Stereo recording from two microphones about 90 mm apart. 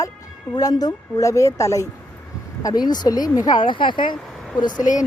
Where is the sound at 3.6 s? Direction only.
65° left (ahead or behind).